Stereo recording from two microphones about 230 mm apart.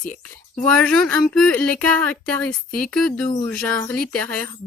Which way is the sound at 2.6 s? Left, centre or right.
Left.